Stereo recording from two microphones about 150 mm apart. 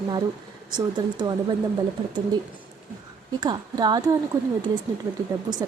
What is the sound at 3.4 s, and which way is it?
Speech, 30° right (ahead or behind).